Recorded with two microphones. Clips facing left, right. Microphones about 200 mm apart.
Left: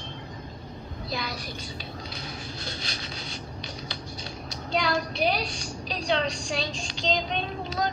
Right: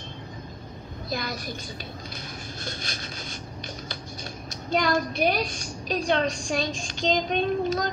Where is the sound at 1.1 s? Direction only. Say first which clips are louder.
Right 3 dB; 50° right (ahead or behind).